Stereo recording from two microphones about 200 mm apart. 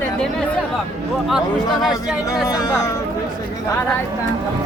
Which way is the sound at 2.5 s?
20° left (ahead or behind).